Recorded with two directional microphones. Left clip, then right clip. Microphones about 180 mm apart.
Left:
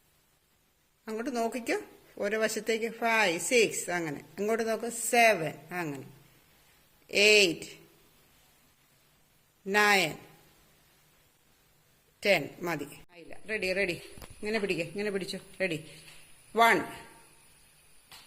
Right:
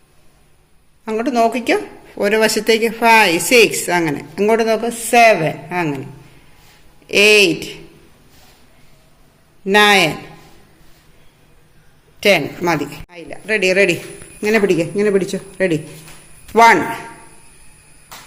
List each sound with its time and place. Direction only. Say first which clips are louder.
1.0 s speech: right 17 dB; 25° left (ahead or behind)
7.1 s speech: right 12 dB; 15° left (ahead or behind)
9.6 s speech: right 14 dB; 15° left (ahead or behind)
12.2 s a man's voice: right 13 dB; 15° left (ahead or behind)